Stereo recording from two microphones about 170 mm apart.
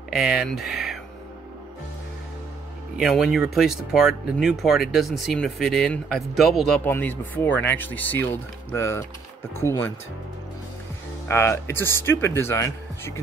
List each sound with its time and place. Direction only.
0.1 s speech: centre (ahead or behind)
3.0 s speech: centre (ahead or behind); by 9.9 s 15° left (ahead or behind)
11.2 s speech: 15° left (ahead or behind)